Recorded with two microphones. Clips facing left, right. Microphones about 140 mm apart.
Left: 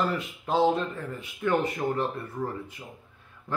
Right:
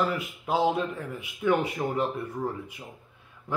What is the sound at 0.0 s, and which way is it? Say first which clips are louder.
Speech: even; 5° right (ahead or behind).